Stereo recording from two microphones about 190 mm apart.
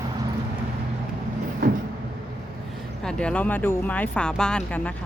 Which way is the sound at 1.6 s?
45° right (ahead or behind).